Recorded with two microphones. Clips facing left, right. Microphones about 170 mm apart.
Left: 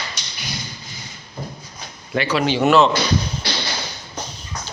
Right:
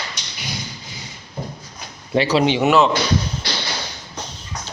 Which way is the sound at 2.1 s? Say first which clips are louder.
Right 3 dB; 30° right (ahead or behind).